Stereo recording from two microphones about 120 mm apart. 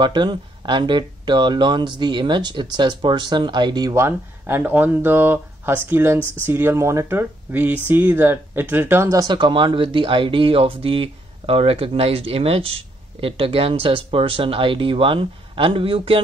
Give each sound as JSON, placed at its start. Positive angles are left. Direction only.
{"t": 0.0, "sound": "speech", "side_deg": -40}
{"t": 3.9, "sound": "speech", "side_deg": -20}